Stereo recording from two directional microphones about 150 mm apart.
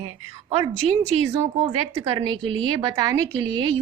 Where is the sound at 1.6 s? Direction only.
40° right (ahead or behind).